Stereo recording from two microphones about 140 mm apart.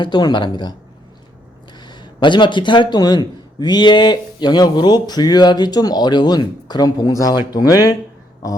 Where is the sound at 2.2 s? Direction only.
35° left (ahead or behind).